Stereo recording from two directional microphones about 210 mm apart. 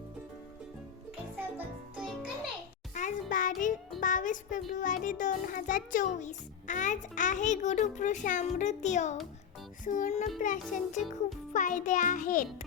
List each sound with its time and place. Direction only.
1.4 s music: 10° right (ahead or behind)
2.9 s music: 35° left (ahead or behind)
4.0 s a child's voice: 40° left (ahead or behind)